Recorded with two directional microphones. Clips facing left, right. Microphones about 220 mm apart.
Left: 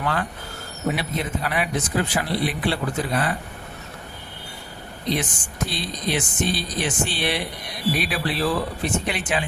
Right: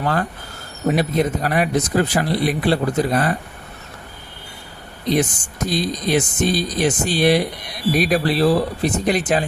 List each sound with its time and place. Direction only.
0.0 s speech: 40° right (ahead or behind)
5.1 s speech: 40° right (ahead or behind)